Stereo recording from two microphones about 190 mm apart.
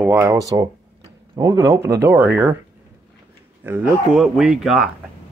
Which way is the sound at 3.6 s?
10° right (ahead or behind).